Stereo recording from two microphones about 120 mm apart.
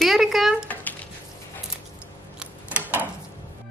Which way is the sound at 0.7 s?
15° left (ahead or behind).